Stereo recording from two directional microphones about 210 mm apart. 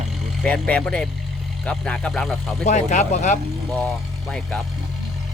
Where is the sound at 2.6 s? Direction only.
35° left (ahead or behind).